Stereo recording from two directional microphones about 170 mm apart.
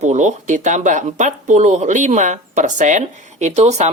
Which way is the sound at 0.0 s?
45° right (ahead or behind).